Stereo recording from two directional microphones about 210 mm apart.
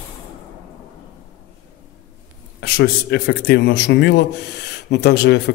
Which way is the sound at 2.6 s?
45° left (ahead or behind).